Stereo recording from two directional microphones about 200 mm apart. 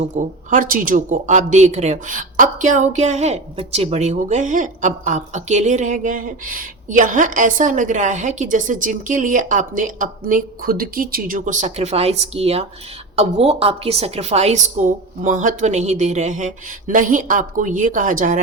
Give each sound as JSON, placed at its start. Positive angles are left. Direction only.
{"t": 0.0, "sound": "speech", "side_deg": -35}